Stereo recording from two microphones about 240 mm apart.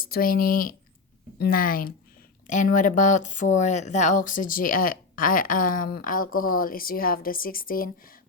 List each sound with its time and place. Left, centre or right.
0.0 s speech: left